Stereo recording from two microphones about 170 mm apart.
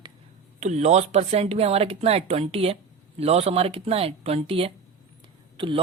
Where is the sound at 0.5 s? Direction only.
40° right (ahead or behind).